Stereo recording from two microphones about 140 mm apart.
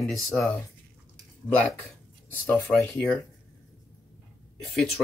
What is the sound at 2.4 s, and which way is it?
Speech, 10° left (ahead or behind).